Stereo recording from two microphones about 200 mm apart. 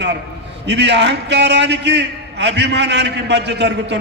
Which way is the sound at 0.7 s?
60° right (ahead or behind).